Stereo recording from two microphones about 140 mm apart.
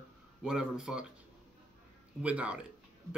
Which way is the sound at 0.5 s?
5° right (ahead or behind).